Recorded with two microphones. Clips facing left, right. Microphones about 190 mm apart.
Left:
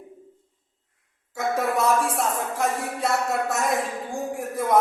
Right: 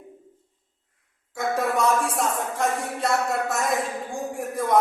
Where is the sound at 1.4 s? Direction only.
Centre (ahead or behind).